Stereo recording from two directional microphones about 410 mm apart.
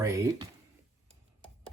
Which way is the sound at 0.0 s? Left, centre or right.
Centre.